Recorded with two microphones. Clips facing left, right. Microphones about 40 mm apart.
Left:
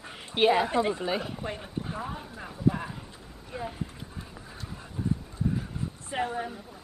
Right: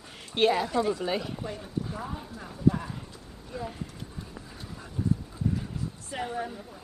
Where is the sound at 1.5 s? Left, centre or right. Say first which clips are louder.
Even; left.